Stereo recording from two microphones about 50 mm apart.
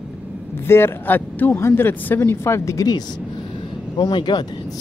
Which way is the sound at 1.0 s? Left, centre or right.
Left.